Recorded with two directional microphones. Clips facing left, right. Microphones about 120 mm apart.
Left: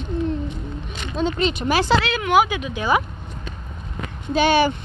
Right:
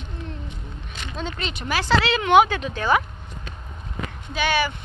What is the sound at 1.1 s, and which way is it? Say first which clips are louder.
Speech: left 9 dB; 20° left (ahead or behind).